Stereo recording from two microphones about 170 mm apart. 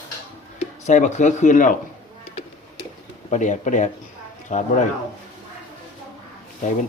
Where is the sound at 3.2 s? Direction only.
45° left (ahead or behind).